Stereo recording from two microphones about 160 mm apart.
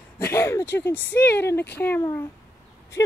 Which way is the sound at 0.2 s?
15° left (ahead or behind).